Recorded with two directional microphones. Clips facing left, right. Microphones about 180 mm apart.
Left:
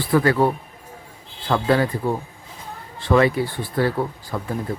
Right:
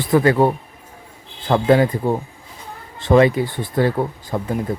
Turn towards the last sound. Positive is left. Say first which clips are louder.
# right 4 dB
turn(degrees=-20)  # may be behind; listen again after turning